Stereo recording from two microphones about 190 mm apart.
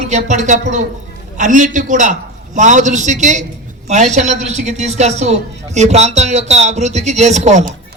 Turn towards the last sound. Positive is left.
turn(degrees=-40)  # may be behind; listen again after turning